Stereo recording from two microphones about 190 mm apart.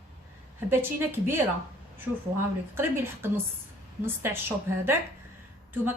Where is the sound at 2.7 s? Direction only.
15° right (ahead or behind).